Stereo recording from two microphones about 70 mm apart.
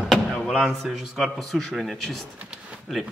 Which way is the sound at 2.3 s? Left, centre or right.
Centre.